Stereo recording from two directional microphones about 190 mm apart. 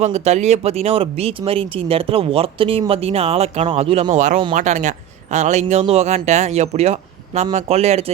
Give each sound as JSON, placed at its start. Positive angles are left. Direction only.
{"t": 0.0, "sound": "speech", "side_deg": -35}